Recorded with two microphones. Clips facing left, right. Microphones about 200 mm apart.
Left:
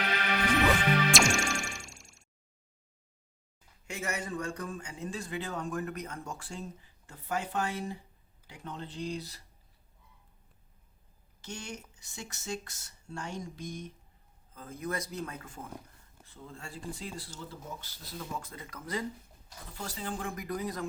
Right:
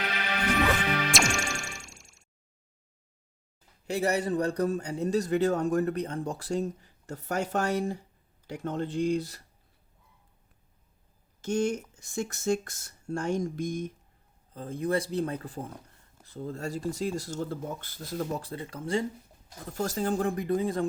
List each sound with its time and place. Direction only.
1.1 s music: centre (ahead or behind)
3.8 s a man's voice: 35° right (ahead or behind); by 9.4 s 50° right (ahead or behind)
11.4 s speech: 50° right (ahead or behind)
14.5 s a man's voice: 30° right (ahead or behind); by 18.4 s 45° right (ahead or behind)
18.4 s speech: 30° right (ahead or behind)
19.7 s a man's voice: 45° right (ahead or behind); by 20.8 s 25° right (ahead or behind)